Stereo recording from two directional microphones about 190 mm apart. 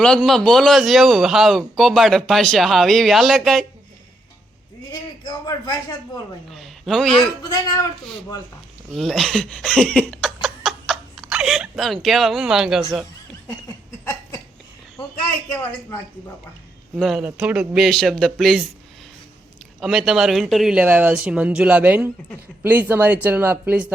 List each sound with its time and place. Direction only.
0.2 s speech: centre (ahead or behind)
4.9 s speech: 20° left (ahead or behind)
6.5 s a man's voice: centre (ahead or behind)
7.4 s speech: 20° left (ahead or behind)
9.0 s speech: centre (ahead or behind)
14.0 s a sound: 15° left (ahead or behind)
15.5 s a woman's voice: 10° left (ahead or behind)
17.0 s speech: centre (ahead or behind)
19.8 s speech: centre (ahead or behind)